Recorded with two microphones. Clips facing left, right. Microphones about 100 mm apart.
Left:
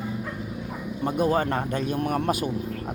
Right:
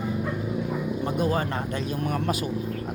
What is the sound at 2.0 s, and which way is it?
Speech, 50° left (ahead or behind).